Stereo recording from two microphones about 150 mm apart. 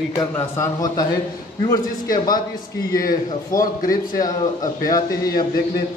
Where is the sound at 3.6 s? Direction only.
70° left (ahead or behind).